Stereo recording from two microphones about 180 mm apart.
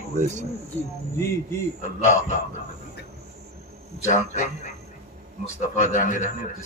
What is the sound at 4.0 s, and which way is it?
A man's voice, 40° left (ahead or behind).